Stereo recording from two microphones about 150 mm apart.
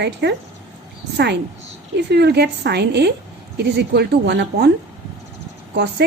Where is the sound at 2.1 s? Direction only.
90° right.